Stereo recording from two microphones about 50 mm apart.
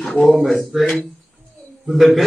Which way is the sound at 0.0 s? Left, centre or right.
Left.